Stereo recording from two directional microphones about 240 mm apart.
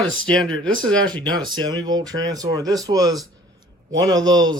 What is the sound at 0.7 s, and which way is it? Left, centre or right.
Speech, right.